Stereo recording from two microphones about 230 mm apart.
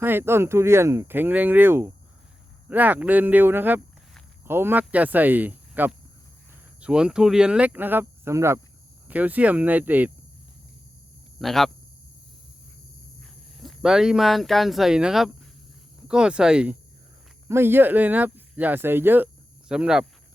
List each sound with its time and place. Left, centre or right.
0.0 s speech: centre
11.3 s speech: centre
13.2 s speech: centre